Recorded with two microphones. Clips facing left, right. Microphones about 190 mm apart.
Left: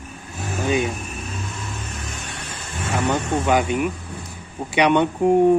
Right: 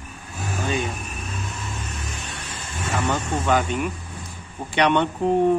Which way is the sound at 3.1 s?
10° left (ahead or behind).